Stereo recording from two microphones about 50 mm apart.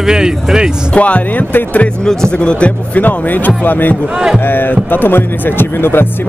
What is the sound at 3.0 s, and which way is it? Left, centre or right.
Speech, left.